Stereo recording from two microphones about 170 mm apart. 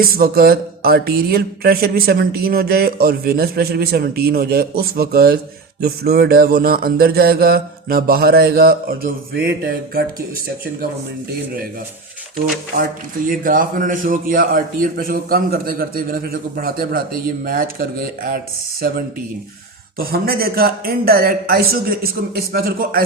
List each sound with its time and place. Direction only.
0.0 s speech: 60° right (ahead or behind)
13.2 s speech: 55° right (ahead or behind)
20.0 s speech: 65° right (ahead or behind)